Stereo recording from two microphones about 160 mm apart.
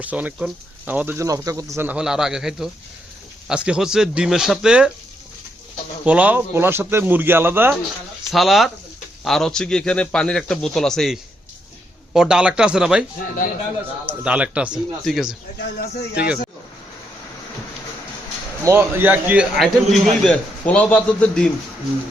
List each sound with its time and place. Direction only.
0.0 s speech: 10° right (ahead or behind)
6.1 s speech: 10° right (ahead or behind)
8.3 s speech: centre (ahead or behind)
13.1 s speech: 60° left (ahead or behind)
14.1 s speech: 10° right (ahead or behind)
18.6 s speech: 15° right (ahead or behind)
19.5 s speech: centre (ahead or behind)